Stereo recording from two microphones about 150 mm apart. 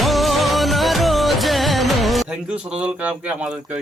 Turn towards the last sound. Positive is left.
turn(degrees=-5)  # may be behind; listen again after turning